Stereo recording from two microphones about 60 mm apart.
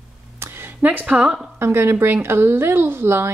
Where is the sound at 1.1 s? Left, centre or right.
Centre.